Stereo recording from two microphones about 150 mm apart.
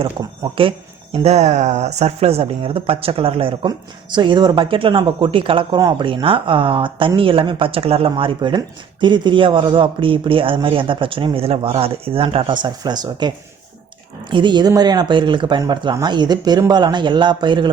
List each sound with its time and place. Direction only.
0.4 s speech: 30° right (ahead or behind)
1.1 s speech: 45° right (ahead or behind)